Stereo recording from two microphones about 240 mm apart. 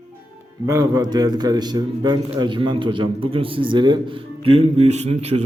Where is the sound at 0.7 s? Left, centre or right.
Centre.